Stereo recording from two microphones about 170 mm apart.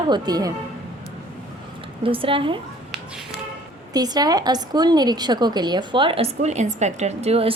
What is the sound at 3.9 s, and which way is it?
A woman's voice, 25° right (ahead or behind).